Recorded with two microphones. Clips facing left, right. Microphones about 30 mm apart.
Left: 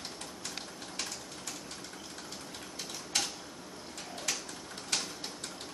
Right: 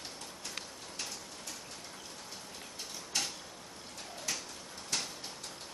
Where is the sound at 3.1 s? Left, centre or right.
Left.